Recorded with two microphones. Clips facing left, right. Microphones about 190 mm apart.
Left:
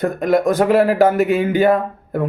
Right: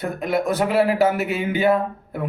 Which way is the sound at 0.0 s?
45° left (ahead or behind).